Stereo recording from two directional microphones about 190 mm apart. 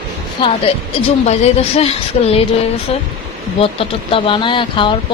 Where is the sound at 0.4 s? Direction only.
25° left (ahead or behind).